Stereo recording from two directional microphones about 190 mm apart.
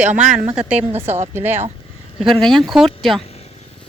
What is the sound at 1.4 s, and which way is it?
Speech, 10° right (ahead or behind).